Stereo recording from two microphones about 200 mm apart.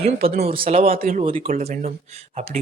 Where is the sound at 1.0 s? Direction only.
45° right (ahead or behind).